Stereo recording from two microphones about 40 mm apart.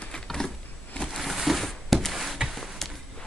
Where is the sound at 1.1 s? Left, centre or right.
Centre.